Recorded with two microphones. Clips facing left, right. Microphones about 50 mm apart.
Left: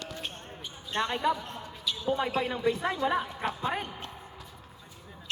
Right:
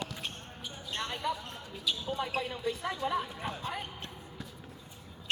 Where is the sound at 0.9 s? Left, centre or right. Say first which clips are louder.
Left 7 dB; left.